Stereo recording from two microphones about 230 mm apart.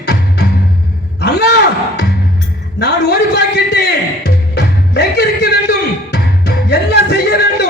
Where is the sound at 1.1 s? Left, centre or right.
Left.